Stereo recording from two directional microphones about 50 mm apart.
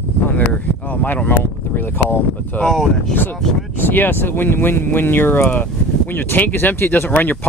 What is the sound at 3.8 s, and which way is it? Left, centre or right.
Speech, left.